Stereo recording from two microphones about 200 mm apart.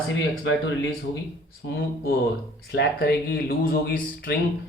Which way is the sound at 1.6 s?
55° left (ahead or behind).